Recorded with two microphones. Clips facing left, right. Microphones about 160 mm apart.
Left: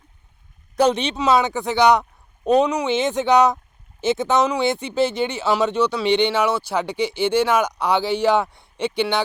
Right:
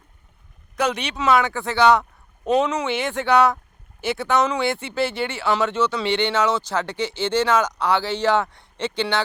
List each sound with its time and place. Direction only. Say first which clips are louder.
0.8 s speech: left 5 dB; 25° left (ahead or behind)